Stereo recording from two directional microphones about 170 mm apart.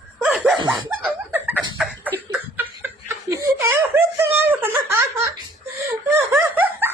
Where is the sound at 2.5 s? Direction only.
10° right (ahead or behind).